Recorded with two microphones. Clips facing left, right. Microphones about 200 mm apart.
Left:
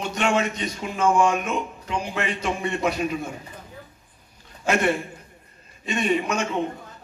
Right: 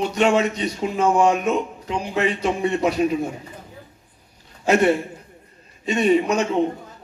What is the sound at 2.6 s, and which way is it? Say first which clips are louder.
Speech: right 5 dB; 35° right (ahead or behind).